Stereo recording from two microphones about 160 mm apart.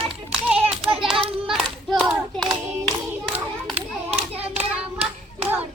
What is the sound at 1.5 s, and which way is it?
Hands, 5° left (ahead or behind).